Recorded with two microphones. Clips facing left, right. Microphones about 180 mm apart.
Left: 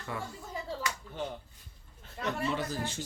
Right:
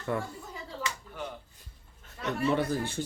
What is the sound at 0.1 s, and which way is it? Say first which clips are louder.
Speech: right 6 dB; 50° right (ahead or behind).